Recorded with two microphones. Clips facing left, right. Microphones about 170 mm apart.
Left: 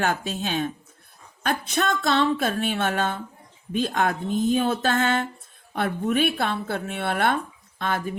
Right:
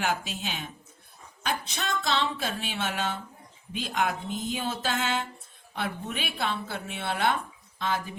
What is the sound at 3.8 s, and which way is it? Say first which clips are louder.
Speech: left 6 dB; 55° left (ahead or behind).